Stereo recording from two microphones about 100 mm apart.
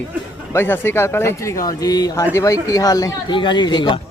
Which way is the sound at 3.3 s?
55° left (ahead or behind).